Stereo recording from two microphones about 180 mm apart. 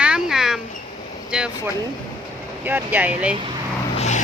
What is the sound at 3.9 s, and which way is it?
Vehicle, 40° left (ahead or behind).